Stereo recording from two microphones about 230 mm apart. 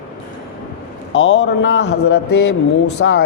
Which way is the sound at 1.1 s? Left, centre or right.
Left.